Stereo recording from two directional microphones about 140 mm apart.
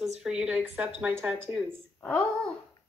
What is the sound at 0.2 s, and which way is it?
Speech, 5° right (ahead or behind).